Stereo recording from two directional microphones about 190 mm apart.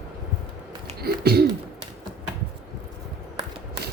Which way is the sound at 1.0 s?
55° right (ahead or behind).